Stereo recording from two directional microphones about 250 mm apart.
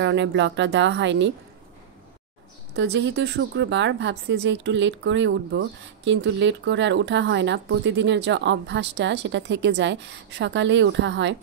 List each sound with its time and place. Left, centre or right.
0.0 s speech: right
2.7 s speech: right